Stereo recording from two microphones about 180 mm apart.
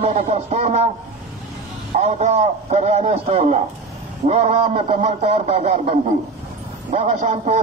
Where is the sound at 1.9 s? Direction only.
35° right (ahead or behind).